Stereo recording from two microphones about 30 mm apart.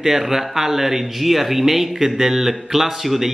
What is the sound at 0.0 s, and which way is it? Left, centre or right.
Speech, centre.